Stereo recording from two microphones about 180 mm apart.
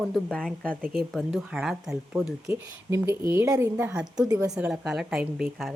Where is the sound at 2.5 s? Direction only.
15° right (ahead or behind).